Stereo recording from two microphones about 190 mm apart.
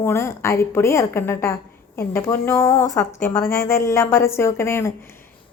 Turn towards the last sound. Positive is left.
turn(degrees=10)  # may be behind; listen again after turning